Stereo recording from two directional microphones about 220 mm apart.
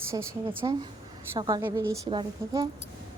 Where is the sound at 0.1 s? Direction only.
15° right (ahead or behind).